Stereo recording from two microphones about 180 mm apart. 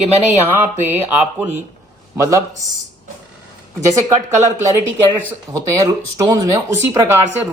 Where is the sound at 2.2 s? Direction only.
15° right (ahead or behind).